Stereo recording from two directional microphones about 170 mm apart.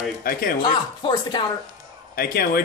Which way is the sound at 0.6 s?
30° left (ahead or behind).